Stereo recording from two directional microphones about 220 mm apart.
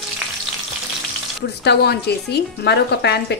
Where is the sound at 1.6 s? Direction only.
50° left (ahead or behind).